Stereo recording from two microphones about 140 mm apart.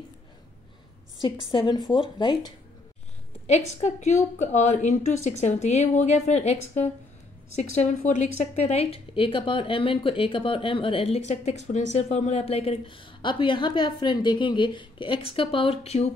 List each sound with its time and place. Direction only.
1.5 s a woman's voice: 35° left (ahead or behind)
3.4 s a woman's voice: 55° left (ahead or behind)